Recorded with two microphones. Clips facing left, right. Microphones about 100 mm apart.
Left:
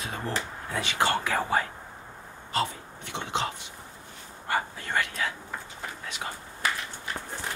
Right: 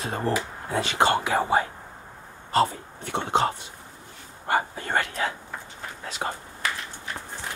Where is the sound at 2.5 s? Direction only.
45° right (ahead or behind).